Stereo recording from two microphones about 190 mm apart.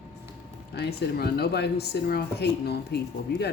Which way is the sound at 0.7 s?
60° left (ahead or behind).